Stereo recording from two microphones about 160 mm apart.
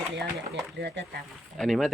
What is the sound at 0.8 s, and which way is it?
Speech, 90° right.